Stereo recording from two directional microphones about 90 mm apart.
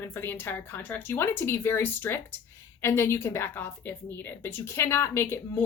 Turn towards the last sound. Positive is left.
turn(degrees=25)  # may be behind; listen again after turning